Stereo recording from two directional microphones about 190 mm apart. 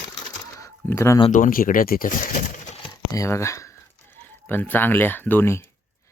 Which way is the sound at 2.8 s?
15° left (ahead or behind).